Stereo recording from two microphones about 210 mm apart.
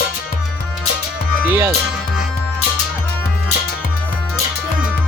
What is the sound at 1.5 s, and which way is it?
Speech, 10° right (ahead or behind).